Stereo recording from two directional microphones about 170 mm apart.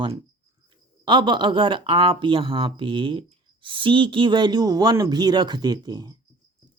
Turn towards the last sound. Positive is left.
turn(degrees=-25)  # may be behind; listen again after turning